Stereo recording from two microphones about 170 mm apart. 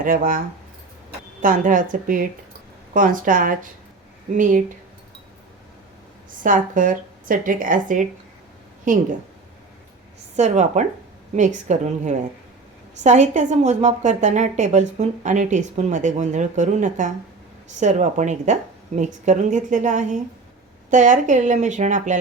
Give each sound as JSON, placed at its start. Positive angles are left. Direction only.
{"t": 0.0, "sound": "a woman's voice", "side_deg": -55}
{"t": 6.4, "sound": "a woman's voice", "side_deg": -50}
{"t": 10.3, "sound": "a woman's voice", "side_deg": -45}